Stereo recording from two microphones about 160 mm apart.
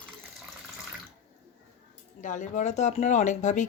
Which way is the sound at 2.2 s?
50° left (ahead or behind).